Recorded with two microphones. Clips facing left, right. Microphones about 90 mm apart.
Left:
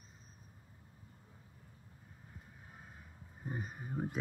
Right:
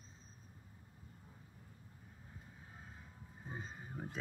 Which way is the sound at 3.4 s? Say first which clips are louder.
Left 5 dB; 15° left (ahead or behind).